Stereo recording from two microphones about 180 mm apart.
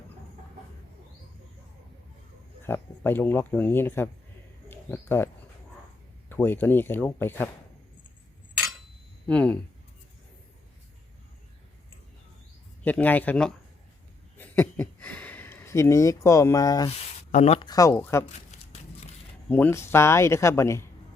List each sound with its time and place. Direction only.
2.6 s speech: 10° left (ahead or behind)
9.2 s speech: 5° left (ahead or behind)
12.8 s speech: 10° left (ahead or behind)
17.0 s a sound: 40° left (ahead or behind)
17.7 s speech: 20° left (ahead or behind)
18.3 s a sound: 40° left (ahead or behind)
19.5 s speech: 10° left (ahead or behind)